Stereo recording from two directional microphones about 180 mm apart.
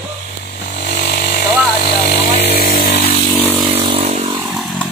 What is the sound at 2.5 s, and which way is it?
Chainsaw, 50° left (ahead or behind).